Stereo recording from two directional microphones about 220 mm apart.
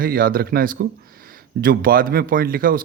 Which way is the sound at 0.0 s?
40° right (ahead or behind).